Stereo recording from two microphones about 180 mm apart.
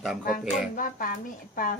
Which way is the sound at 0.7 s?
50° left (ahead or behind).